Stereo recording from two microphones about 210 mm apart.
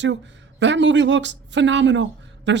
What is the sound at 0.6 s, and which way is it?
Speech, 60° right (ahead or behind).